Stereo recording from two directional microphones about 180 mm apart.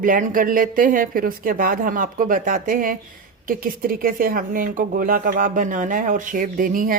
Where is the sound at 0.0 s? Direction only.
50° right (ahead or behind).